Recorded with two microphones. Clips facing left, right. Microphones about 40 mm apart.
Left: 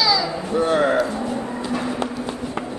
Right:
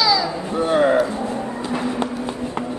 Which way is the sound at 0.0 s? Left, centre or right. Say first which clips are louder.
Right 1 dB; centre.